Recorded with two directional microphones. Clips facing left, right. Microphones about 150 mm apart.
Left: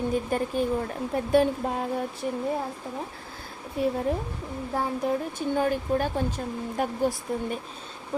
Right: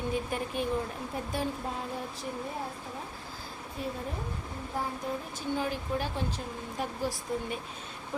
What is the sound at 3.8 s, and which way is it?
Speech, 70° left (ahead or behind).